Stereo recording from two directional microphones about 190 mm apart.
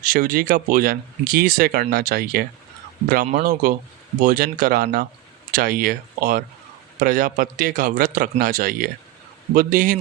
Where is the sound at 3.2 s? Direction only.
40° right (ahead or behind).